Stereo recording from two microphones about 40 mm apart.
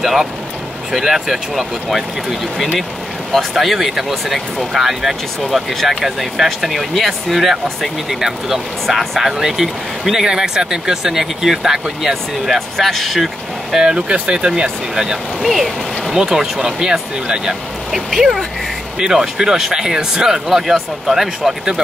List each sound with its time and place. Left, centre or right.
0.0 s speech: centre
3.5 s speech: centre
5.8 s speech: centre
6.0 s speech: centre
13.7 s speech: right
14.5 s speech: centre
15.4 s speech: centre
16.1 s speech: centre
18.9 s speech: centre